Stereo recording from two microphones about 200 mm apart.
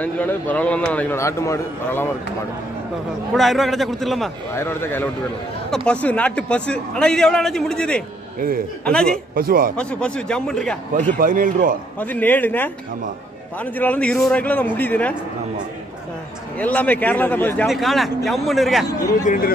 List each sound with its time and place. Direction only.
0.0 s a man's voice: 10° left (ahead or behind)
3.3 s a man's voice: centre (ahead or behind)
4.6 s a man's voice: 10° left (ahead or behind)
9.3 s a man's voice: 45° right (ahead or behind)
9.8 s a man's voice: 5° left (ahead or behind)
11.0 s speech: 40° right (ahead or behind)
12.0 s a man's voice: 10° left (ahead or behind)
16.5 s a man's voice: 10° left (ahead or behind)
18.9 s a man's voice: 15° left (ahead or behind)
19.2 s speech: 45° left (ahead or behind)